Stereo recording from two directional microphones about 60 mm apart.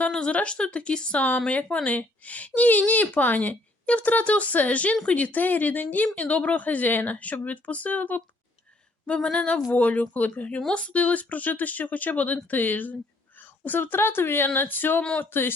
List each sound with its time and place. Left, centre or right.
0.1 s speech: centre
9.0 s speech: centre; by 15.5 s left